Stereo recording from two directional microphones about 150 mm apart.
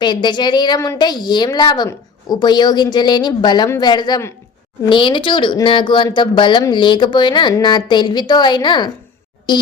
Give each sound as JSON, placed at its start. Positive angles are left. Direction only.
{"t": 0.0, "sound": "a woman's voice", "side_deg": 30}